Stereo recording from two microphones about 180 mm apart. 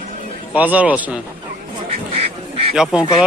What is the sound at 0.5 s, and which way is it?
Speech, 10° right (ahead or behind).